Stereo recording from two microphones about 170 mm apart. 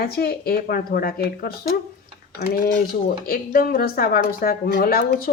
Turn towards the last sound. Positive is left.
turn(degrees=65)  # may be behind; listen again after turning